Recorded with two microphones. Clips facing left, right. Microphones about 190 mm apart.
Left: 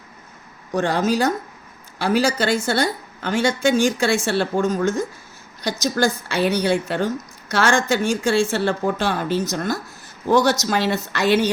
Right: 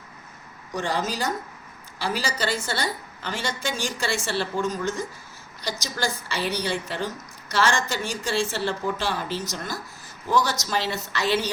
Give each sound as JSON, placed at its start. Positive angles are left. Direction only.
{"t": 0.7, "sound": "speech", "side_deg": 55}
{"t": 10.2, "sound": "speech", "side_deg": 65}